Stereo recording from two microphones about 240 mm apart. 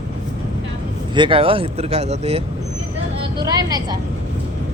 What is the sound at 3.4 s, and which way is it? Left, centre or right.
Speech, centre.